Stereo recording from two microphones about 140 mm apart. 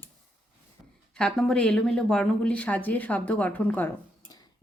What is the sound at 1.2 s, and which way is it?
Speech, 5° left (ahead or behind).